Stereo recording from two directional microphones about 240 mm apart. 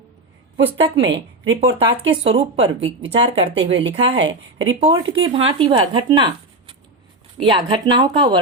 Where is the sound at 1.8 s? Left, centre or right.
Right.